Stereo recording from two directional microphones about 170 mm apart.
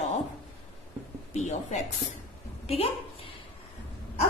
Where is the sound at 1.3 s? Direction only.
45° left (ahead or behind).